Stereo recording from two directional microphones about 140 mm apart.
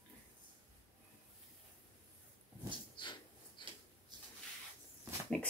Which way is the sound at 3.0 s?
35° left (ahead or behind).